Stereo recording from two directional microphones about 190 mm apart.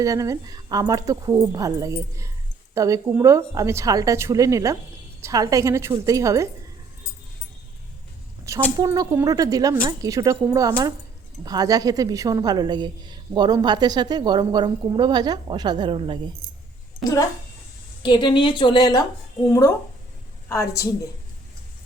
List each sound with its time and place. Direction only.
0.0 s speech: 15° right (ahead or behind)
8.5 s a woman's voice: 15° right (ahead or behind)
17.0 s a woman's voice: 15° left (ahead or behind)